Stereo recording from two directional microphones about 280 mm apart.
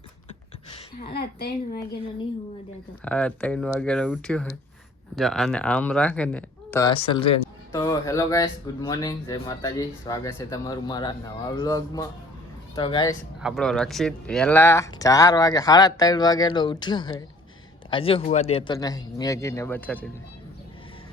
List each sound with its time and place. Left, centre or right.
1.1 s a woman's voice: left
3.0 s speech: centre
13.4 s speech: centre